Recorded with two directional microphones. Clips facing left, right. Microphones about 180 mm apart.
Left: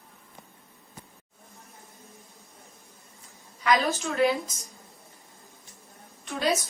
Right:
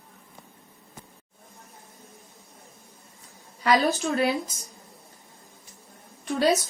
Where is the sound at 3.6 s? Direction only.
35° right (ahead or behind).